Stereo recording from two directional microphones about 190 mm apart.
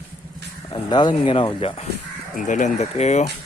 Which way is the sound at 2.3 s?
40° left (ahead or behind).